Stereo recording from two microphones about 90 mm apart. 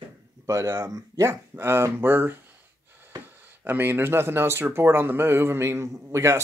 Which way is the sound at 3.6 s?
25° right (ahead or behind).